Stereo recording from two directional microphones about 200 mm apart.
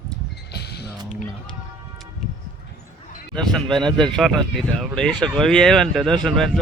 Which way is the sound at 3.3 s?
5° left (ahead or behind).